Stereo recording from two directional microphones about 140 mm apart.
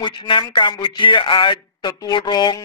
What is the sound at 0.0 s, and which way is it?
Speech, 35° left (ahead or behind).